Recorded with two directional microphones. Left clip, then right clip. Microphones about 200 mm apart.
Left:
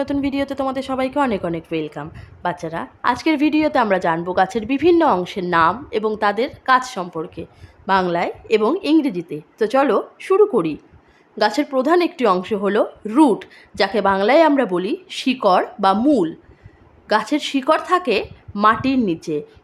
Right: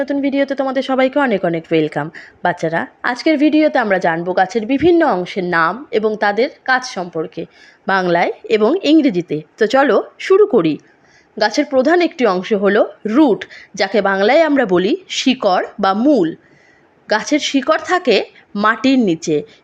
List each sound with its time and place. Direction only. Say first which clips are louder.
0.0 s a woman's voice: right 5 dB; centre (ahead or behind)
5.5 s a woman's voice: right 1 dB; 15° right (ahead or behind)
7.9 s a woman's voice: right 4 dB; 20° right (ahead or behind)